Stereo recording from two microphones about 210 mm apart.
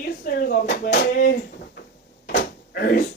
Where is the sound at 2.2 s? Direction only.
50° left (ahead or behind).